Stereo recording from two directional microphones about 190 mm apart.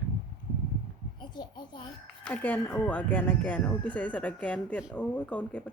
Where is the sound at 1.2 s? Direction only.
25° left (ahead or behind).